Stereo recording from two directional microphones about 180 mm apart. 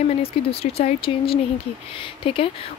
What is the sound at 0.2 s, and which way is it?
Speech, 35° left (ahead or behind).